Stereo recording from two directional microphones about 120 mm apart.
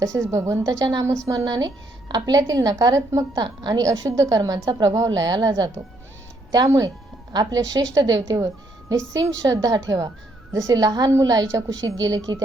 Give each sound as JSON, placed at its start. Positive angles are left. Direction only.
{"t": 0.0, "sound": "a woman's voice", "side_deg": -25}